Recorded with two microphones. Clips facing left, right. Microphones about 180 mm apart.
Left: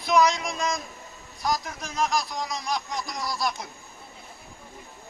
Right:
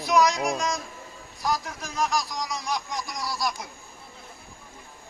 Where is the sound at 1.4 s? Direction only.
Centre (ahead or behind).